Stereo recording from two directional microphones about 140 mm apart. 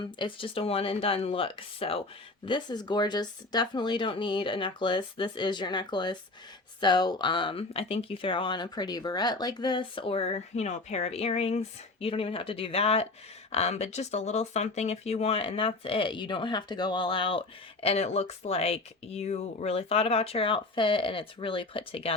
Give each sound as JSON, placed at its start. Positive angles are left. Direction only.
{"t": 0.0, "sound": "speech", "side_deg": 35}